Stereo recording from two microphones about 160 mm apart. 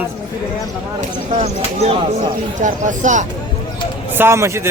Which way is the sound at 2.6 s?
50° right (ahead or behind).